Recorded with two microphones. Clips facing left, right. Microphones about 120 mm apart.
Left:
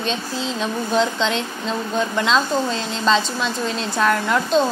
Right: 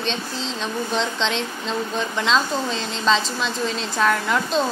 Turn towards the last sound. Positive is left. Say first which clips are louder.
# left 3 dB
turn(degrees=0)  # may be behind; listen again after turning